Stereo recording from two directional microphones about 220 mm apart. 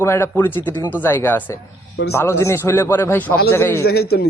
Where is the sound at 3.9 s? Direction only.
45° left (ahead or behind).